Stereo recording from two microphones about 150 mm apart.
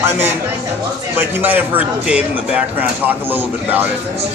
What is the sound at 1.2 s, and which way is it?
Speech, 10° right (ahead or behind).